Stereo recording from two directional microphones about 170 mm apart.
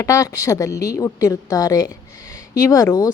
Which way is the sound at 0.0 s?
20° left (ahead or behind).